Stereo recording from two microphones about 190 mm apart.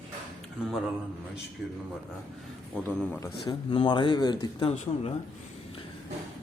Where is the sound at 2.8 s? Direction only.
10° left (ahead or behind).